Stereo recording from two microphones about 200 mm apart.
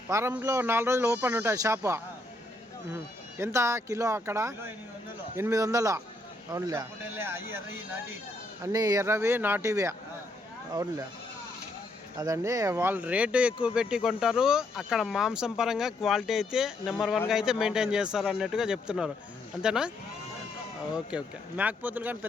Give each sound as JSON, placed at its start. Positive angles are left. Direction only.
{"t": 0.1, "sound": "speech", "side_deg": -10}
{"t": 8.6, "sound": "speech", "side_deg": -20}
{"t": 12.2, "sound": "speech", "side_deg": -15}
{"t": 20.9, "sound": "speech", "side_deg": -5}